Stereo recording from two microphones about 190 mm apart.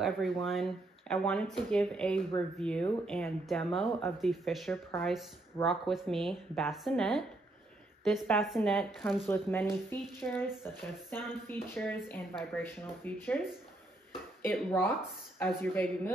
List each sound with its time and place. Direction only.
0.0 s speech: centre (ahead or behind)
9.3 s speech: 10° left (ahead or behind)
14.4 s speech: 10° left (ahead or behind)